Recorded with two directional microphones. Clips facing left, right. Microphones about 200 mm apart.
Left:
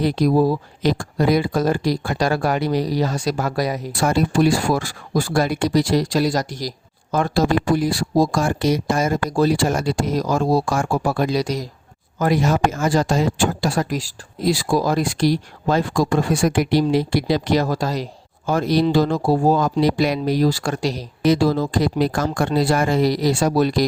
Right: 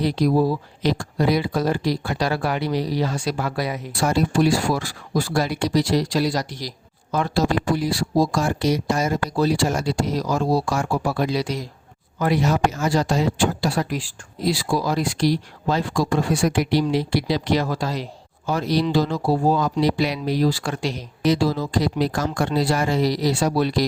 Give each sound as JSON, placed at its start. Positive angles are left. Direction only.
{"t": 0.0, "sound": "speech", "side_deg": 50}
{"t": 21.2, "sound": "speech", "side_deg": 50}